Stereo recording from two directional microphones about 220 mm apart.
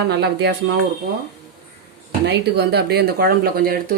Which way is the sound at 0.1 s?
50° right (ahead or behind).